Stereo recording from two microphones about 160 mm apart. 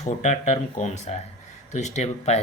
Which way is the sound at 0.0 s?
45° left (ahead or behind).